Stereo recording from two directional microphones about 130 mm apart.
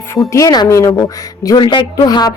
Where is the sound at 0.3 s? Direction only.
30° left (ahead or behind).